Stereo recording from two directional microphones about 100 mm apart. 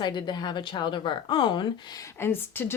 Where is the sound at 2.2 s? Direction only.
25° left (ahead or behind).